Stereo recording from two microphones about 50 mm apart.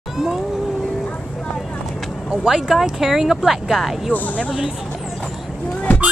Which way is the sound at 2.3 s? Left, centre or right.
Centre.